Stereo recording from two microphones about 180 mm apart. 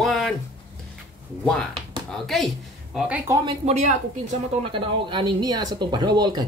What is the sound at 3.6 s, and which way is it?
Speech, 35° right (ahead or behind).